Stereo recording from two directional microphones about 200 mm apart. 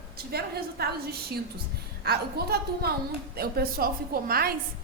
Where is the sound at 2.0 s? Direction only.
50° right (ahead or behind).